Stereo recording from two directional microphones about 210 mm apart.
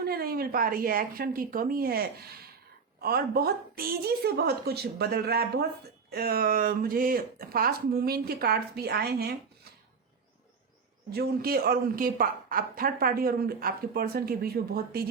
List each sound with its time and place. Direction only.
0.0 s speech: 45° right (ahead or behind)
11.1 s speech: 45° right (ahead or behind)